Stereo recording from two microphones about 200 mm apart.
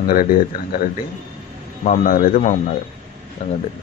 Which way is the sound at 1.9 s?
40° left (ahead or behind).